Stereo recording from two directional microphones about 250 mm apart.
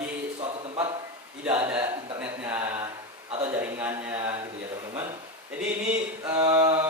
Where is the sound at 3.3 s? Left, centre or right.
Right.